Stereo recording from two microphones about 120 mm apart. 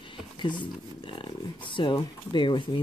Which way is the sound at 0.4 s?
40° left (ahead or behind).